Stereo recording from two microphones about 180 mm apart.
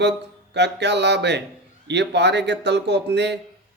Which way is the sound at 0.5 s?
70° right (ahead or behind).